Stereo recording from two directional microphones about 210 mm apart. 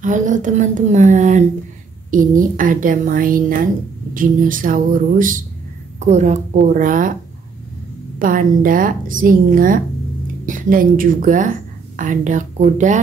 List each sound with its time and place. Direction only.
0.0 s a woman's voice: 35° right (ahead or behind)
8.2 s a woman's voice: 40° right (ahead or behind)